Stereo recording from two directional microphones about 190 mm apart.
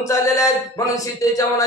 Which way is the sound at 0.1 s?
15° left (ahead or behind).